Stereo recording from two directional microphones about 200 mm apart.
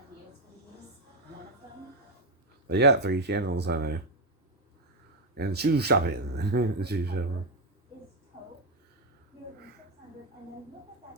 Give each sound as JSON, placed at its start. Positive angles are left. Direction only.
{"t": 2.6, "sound": "speech", "side_deg": -55}
{"t": 5.4, "sound": "speech", "side_deg": -55}